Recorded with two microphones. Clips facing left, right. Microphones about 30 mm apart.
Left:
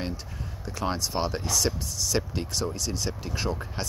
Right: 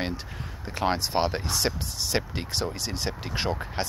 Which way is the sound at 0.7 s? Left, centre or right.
Right.